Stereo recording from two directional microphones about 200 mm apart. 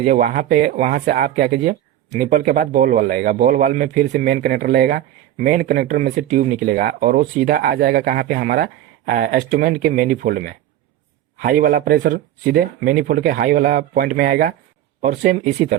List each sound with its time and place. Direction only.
0.0 s speech: 40° right (ahead or behind)